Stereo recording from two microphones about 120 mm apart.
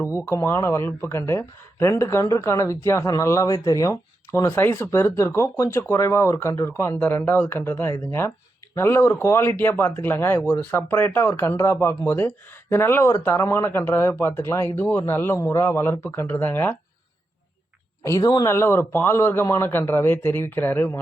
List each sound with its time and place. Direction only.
0.3 s speech: 20° left (ahead or behind)
18.0 s speech: 30° left (ahead or behind)
18.5 s speech: 20° left (ahead or behind)